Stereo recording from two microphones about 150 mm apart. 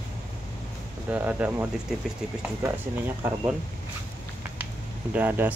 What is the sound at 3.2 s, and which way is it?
Speech, 15° right (ahead or behind).